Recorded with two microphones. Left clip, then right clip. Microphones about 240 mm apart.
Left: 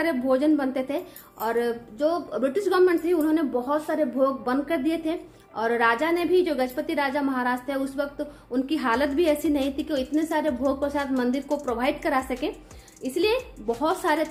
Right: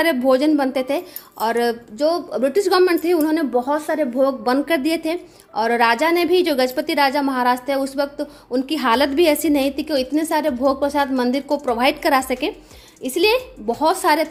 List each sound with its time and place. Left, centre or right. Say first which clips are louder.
0.0 s a woman's voice: right 7 dB; right